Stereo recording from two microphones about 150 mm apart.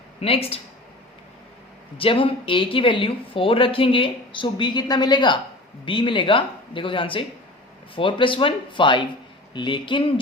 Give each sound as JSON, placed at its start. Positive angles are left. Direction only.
{"t": 0.2, "sound": "speech", "side_deg": 40}
{"t": 2.0, "sound": "speech", "side_deg": 35}